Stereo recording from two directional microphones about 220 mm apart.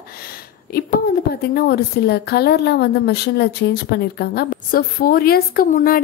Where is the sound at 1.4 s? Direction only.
45° left (ahead or behind).